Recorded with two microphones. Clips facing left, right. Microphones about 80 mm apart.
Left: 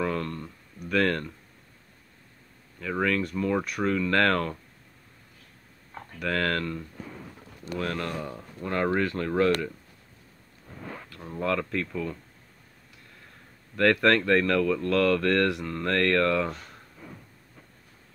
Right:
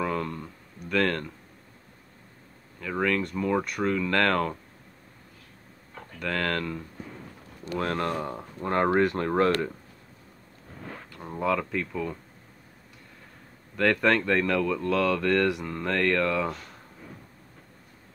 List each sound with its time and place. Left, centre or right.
0.0 s a sound: centre
0.7 s speech: centre
2.8 s speech: centre
6.1 s speech: centre
7.7 s speech: right
11.1 s speech: centre
13.7 s speech: centre